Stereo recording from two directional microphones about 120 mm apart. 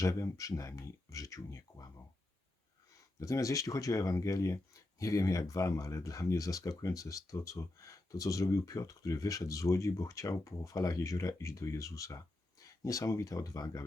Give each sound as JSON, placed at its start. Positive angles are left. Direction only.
{"t": 0.0, "sound": "speech", "side_deg": 25}
{"t": 3.2, "sound": "speech", "side_deg": 25}